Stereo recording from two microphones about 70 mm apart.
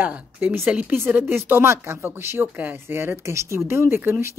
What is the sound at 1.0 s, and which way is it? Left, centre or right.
A woman's voice, right.